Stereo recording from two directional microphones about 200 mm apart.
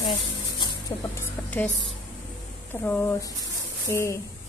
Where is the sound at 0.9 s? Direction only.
15° left (ahead or behind).